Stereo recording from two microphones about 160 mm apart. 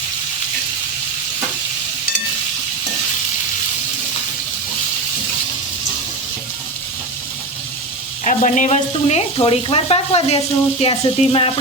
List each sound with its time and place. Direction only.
8.2 s sizzle: 50° left (ahead or behind)